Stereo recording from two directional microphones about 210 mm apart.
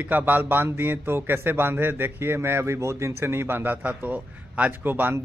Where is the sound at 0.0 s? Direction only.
10° right (ahead or behind).